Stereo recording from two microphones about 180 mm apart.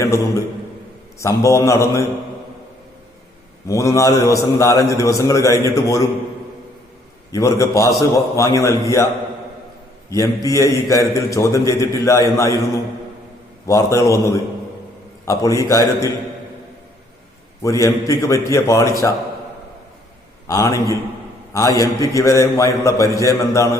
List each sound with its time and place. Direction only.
1.2 s a man's voice: 15° left (ahead or behind)
3.7 s a man's voice: 15° left (ahead or behind)
7.3 s a man's voice: 15° left (ahead or behind)
10.1 s a man's voice: 20° left (ahead or behind)
17.6 s a man's voice: 15° left (ahead or behind)
20.5 s a man's voice: 15° left (ahead or behind)